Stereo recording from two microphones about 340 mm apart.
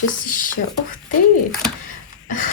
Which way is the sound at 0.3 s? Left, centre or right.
Left.